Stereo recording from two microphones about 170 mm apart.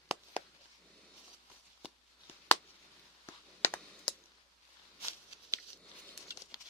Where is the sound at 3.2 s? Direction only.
15° left (ahead or behind).